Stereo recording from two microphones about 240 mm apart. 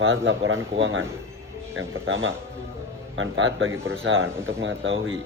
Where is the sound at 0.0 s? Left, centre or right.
Right.